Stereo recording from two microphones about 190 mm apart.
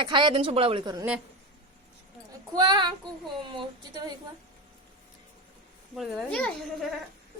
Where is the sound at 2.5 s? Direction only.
20° right (ahead or behind).